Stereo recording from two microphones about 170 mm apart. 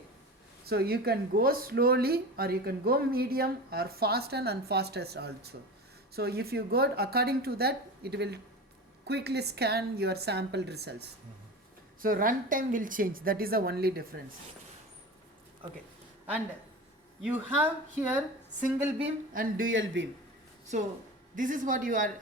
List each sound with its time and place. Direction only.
0.7 s a woman's voice: 65° right (ahead or behind)
12.0 s speech: 55° right (ahead or behind)
17.2 s speech: 10° right (ahead or behind)
19.3 s speech: 55° right (ahead or behind)
19.7 s speech: 90° right
21.3 s speech: 50° right (ahead or behind)